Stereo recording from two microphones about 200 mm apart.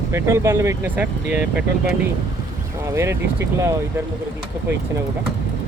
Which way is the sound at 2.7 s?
15° right (ahead or behind).